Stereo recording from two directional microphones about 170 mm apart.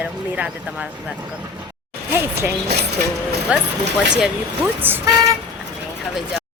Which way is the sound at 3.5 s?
5° right (ahead or behind).